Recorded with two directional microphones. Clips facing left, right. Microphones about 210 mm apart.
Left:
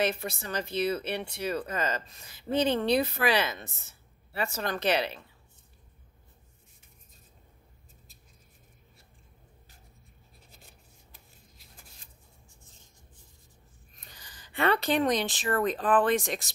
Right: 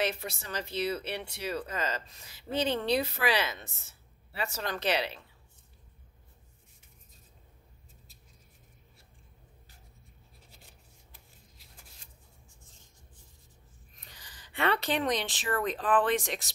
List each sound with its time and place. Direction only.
0.0 s speech: 50° left (ahead or behind)
14.1 s speech: 45° left (ahead or behind)